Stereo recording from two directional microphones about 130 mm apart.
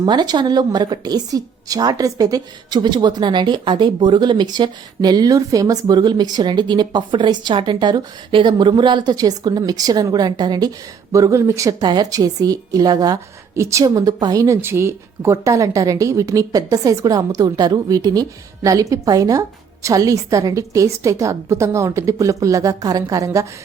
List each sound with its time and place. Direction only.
0.0 s a woman's voice: 30° right (ahead or behind)